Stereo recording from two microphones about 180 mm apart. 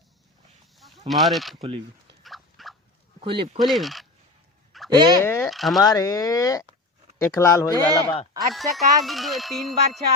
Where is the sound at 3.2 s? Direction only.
30° right (ahead or behind).